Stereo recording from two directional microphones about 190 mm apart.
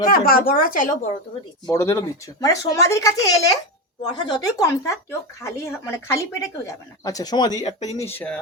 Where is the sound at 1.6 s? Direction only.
15° left (ahead or behind).